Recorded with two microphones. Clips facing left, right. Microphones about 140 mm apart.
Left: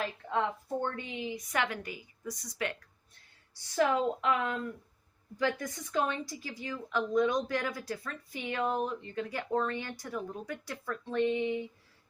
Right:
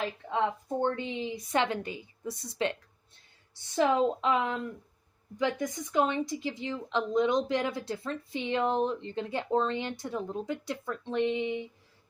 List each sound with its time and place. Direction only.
0.3 s a woman's voice: 20° right (ahead or behind)